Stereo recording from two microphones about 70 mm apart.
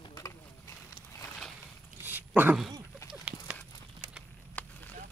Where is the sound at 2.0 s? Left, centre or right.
Right.